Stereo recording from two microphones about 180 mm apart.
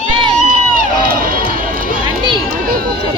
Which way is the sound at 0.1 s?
30° right (ahead or behind).